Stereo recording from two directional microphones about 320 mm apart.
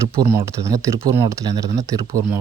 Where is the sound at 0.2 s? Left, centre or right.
Centre.